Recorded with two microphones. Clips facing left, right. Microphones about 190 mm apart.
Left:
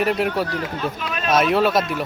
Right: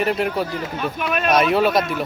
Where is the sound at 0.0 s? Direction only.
Centre (ahead or behind).